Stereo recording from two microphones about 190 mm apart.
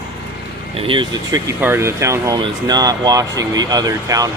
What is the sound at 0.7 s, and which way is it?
Speech, 30° right (ahead or behind).